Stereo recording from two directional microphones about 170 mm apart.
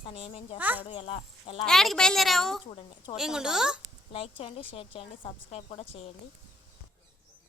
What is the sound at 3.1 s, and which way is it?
Speech, 5° right (ahead or behind).